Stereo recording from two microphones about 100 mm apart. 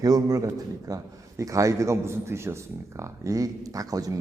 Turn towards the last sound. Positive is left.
turn(degrees=-35)  # may be behind; listen again after turning